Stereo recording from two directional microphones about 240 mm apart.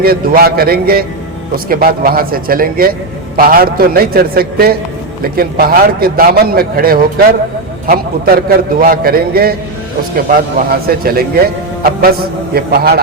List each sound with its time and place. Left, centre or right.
0.0 s a man's voice: right
10.7 s a man's voice: right